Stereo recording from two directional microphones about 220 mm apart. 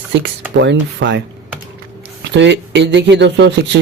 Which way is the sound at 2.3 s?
55° right (ahead or behind).